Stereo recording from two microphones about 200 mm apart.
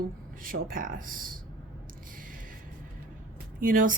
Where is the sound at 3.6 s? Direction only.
45° right (ahead or behind).